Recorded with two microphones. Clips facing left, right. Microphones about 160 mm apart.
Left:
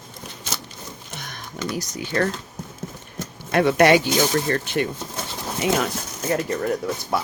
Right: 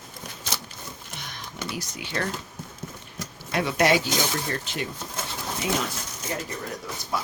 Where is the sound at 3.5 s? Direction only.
55° left (ahead or behind).